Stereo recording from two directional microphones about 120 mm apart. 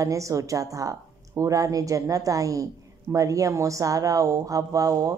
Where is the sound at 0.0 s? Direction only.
25° right (ahead or behind).